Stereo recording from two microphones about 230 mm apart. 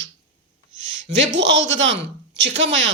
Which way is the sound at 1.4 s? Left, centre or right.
Right.